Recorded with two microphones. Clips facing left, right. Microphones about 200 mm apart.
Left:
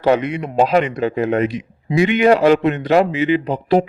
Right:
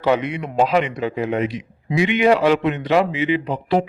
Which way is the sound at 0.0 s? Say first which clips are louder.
Left 3 dB; 45° left (ahead or behind).